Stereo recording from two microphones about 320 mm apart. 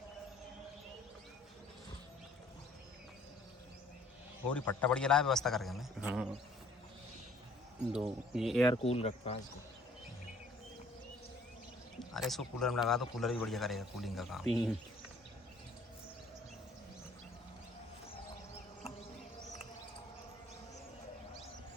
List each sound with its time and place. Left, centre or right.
4.4 s a man's voice: centre
7.9 s a man's voice: centre
8.6 s speech: centre
11.9 s a man's voice: centre